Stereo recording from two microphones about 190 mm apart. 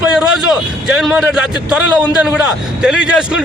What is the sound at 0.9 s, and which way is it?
A man's voice, 5° right (ahead or behind).